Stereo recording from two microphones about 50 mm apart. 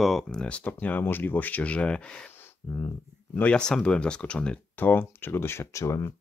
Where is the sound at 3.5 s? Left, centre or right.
Centre.